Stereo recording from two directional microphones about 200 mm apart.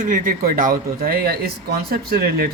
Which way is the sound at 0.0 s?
40° right (ahead or behind).